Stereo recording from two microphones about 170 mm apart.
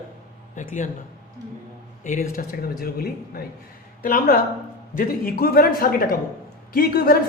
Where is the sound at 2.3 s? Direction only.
50° left (ahead or behind).